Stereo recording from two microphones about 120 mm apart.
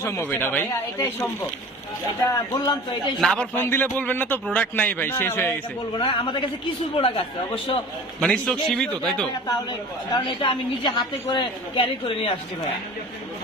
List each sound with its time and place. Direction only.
0.0 s speech: 20° left (ahead or behind)
2.5 s a man's voice: 35° left (ahead or behind)
3.2 s a man's voice: 5° left (ahead or behind)
3.5 s a man's voice: 15° left (ahead or behind)
5.9 s a woman's voice: 50° left (ahead or behind)
8.2 s a man's voice: 5° left (ahead or behind)
9.7 s a woman's voice: 40° left (ahead or behind)